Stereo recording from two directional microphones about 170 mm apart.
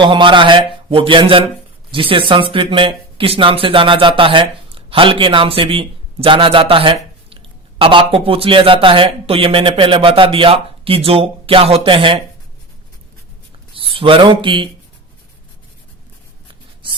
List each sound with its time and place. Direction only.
0.0 s a man's voice: 30° right (ahead or behind)
13.7 s speech: 30° right (ahead or behind)